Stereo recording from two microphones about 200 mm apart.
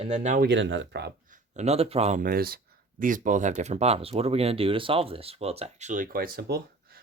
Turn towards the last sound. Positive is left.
turn(degrees=-50)  # may be behind; listen again after turning